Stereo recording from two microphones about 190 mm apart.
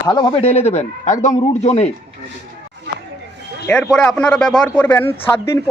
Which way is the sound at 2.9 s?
65° right (ahead or behind).